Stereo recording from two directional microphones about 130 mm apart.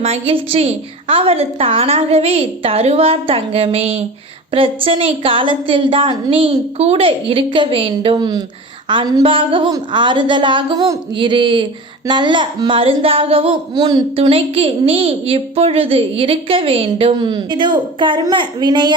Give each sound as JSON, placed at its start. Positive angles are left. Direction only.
{"t": 0.0, "sound": "a woman's voice", "side_deg": -50}
{"t": 6.5, "sound": "a woman's voice", "side_deg": -55}
{"t": 13.7, "sound": "a woman's voice", "side_deg": -30}
{"t": 14.2, "sound": "a woman's voice", "side_deg": -45}